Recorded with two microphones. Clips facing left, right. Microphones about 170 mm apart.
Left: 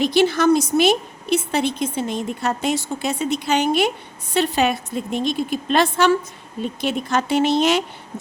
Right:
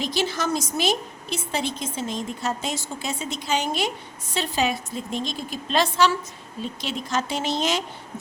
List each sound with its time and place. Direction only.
0.0 s a woman's voice: 60° left (ahead or behind)